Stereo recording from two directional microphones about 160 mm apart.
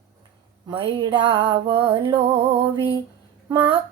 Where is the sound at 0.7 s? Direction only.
30° right (ahead or behind).